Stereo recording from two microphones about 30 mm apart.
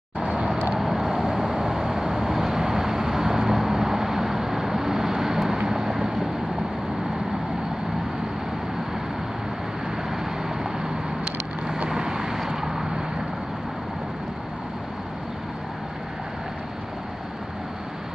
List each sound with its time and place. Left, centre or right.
0.7 s vehicle: centre
10.1 s vehicle: centre
11.9 s vehicle: right